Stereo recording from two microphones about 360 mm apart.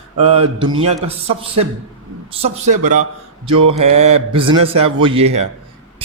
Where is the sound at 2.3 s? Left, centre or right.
Centre.